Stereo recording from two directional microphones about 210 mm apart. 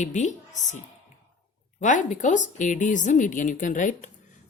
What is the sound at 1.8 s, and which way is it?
Speech, 35° left (ahead or behind).